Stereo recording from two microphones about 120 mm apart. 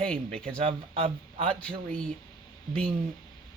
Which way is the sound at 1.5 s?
10° left (ahead or behind).